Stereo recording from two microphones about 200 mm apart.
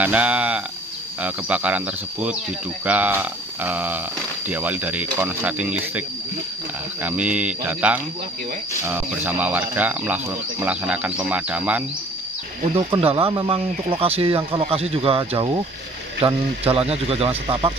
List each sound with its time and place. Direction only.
0.0 s speech: 5° right (ahead or behind)
12.7 s speech: 30° right (ahead or behind)